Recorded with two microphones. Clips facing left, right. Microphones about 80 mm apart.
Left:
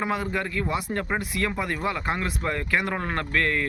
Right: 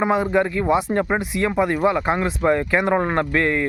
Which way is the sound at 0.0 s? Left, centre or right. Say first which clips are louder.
Right 9 dB; right.